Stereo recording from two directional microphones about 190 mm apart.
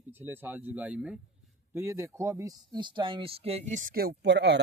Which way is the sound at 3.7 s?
40° right (ahead or behind).